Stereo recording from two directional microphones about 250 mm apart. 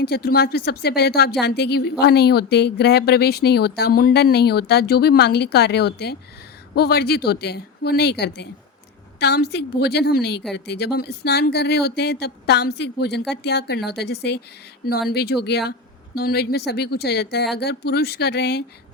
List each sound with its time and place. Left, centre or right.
0.0 s speech: left